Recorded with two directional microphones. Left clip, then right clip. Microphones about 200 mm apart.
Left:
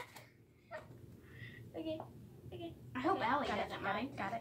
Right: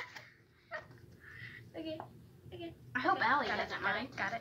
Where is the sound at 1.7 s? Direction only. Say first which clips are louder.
Left 1 dB; 20° left (ahead or behind).